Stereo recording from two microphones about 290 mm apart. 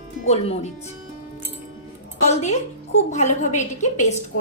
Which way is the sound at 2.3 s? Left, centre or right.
Left.